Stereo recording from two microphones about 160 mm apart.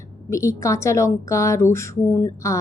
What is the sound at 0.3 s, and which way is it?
Speech, 20° left (ahead or behind).